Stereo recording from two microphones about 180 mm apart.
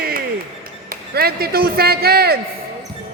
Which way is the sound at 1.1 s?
60° right (ahead or behind).